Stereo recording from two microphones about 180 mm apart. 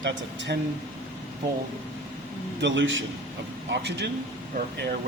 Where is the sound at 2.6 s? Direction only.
90° right.